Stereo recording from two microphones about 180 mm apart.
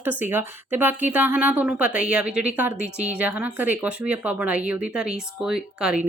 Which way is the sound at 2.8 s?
40° right (ahead or behind).